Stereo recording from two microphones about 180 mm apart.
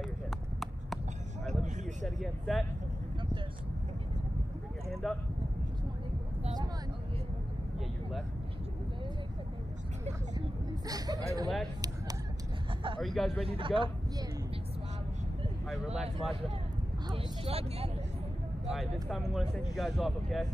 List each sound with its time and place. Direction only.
1.5 s a sound: 40° right (ahead or behind)
2.0 s speech: centre (ahead or behind)
5.0 s speech: centre (ahead or behind)
10.9 s speech: 20° right (ahead or behind)
13.0 s speech: centre (ahead or behind)
13.5 s speech: 30° right (ahead or behind)
15.7 s speech: centre (ahead or behind)
17.1 s speech: 35° right (ahead or behind)
18.7 s speech: centre (ahead or behind)